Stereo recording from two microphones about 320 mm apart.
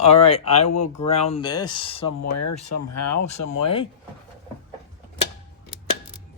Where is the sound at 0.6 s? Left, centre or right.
Left.